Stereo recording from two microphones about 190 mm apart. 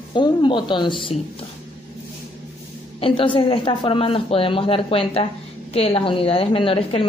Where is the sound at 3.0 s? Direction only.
25° left (ahead or behind).